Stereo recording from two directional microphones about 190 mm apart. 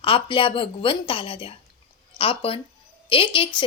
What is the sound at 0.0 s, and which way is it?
A woman's voice, 30° left (ahead or behind).